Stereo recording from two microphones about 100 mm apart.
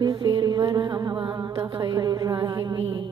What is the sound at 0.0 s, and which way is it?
Music, 50° right (ahead or behind).